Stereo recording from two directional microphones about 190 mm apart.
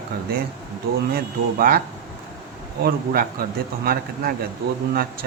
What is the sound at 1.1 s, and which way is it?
Speech, 50° right (ahead or behind).